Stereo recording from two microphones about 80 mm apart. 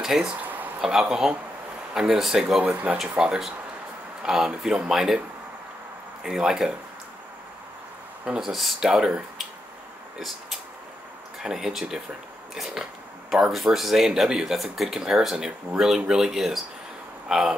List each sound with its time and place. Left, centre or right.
0.0 s speech: centre
0.4 s a sound: right
0.7 s speech: centre
2.7 s speech: centre
3.0 s speech: centre
6.2 s speech: centre
8.3 s speech: centre
10.1 s a sound: centre
11.4 s speech: centre
13.3 s speech: centre